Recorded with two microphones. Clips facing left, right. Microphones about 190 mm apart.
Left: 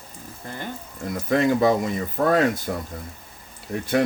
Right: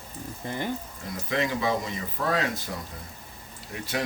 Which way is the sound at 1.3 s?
50° left (ahead or behind).